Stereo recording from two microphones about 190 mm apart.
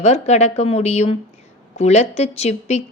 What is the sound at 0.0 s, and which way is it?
Speech, 35° left (ahead or behind).